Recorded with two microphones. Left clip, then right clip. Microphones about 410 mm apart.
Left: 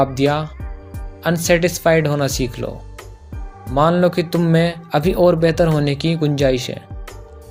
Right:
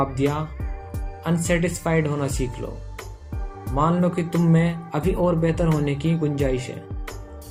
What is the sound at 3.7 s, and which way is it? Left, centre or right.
Speech, left.